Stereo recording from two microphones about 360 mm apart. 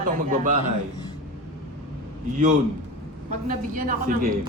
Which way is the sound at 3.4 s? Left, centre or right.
Right.